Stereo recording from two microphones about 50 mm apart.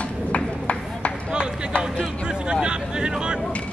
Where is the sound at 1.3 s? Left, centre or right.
Centre.